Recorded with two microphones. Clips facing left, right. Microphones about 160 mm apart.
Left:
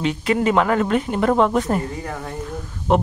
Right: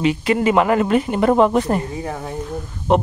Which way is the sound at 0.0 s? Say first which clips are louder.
Right 2 dB; centre (ahead or behind).